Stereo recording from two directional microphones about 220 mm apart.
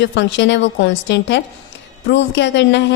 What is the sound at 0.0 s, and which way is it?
A woman's voice, 55° left (ahead or behind).